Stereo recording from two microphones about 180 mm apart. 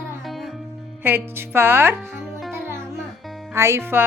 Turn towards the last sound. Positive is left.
turn(degrees=-15)  # may be behind; listen again after turning